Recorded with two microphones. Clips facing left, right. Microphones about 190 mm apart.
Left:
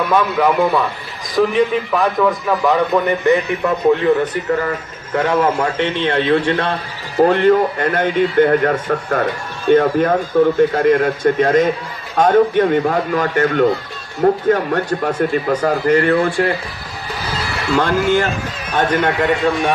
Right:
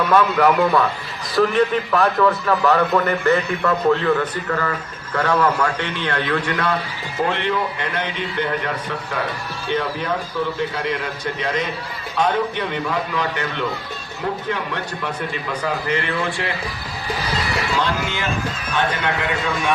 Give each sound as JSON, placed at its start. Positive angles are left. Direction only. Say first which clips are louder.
{"t": 0.1, "sound": "a man's voice", "louder": "even", "side_deg": 10}
{"t": 7.2, "sound": "speech", "louder": "left 10 dB", "side_deg": 40}
{"t": 17.7, "sound": "speech", "louder": "left 13 dB", "side_deg": 50}